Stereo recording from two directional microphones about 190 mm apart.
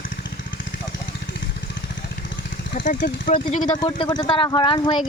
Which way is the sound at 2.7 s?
45° left (ahead or behind).